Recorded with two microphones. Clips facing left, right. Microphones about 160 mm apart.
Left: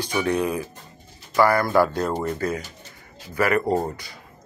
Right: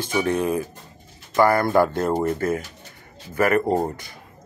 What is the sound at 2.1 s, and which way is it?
Speech, 45° right (ahead or behind).